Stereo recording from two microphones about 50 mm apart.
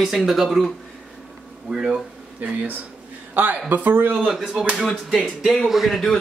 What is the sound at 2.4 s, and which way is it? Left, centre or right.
A woman's voice, right.